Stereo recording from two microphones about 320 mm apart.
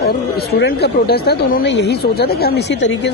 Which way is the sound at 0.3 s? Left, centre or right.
Left.